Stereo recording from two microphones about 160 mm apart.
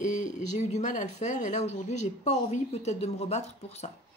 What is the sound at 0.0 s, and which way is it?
Speech, 50° left (ahead or behind).